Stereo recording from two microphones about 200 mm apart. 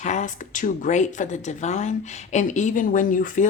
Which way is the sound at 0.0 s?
35° left (ahead or behind).